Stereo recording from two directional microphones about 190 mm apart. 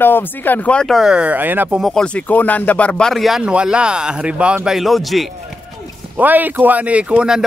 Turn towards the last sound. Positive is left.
turn(degrees=-5)  # may be behind; listen again after turning